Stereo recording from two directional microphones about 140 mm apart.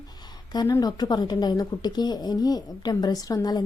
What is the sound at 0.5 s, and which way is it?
A woman's voice, 30° left (ahead or behind).